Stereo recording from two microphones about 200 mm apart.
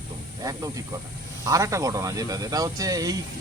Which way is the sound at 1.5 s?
15° right (ahead or behind).